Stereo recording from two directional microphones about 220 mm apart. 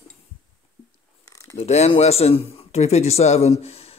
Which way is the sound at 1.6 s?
30° left (ahead or behind).